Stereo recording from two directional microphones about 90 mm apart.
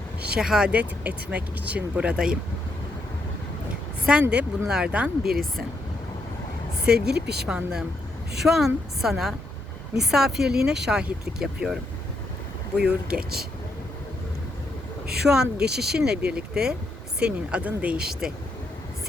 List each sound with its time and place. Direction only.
0.2 s speech: 10° right (ahead or behind)
4.0 s speech: 10° right (ahead or behind)
6.9 s speech: 5° right (ahead or behind)
15.3 s speech: 10° right (ahead or behind)